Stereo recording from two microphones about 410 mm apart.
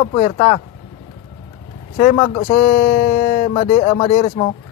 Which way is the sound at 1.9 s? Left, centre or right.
Centre.